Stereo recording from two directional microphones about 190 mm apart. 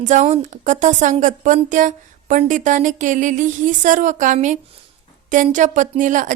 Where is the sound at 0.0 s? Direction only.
40° right (ahead or behind).